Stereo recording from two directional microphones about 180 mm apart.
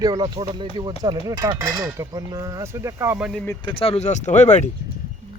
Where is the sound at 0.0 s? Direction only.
20° right (ahead or behind).